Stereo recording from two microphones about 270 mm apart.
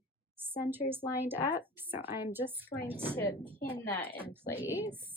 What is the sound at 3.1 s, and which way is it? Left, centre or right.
A woman's voice, centre.